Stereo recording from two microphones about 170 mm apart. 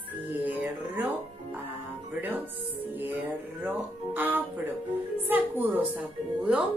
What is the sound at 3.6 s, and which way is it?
Speech, 10° right (ahead or behind).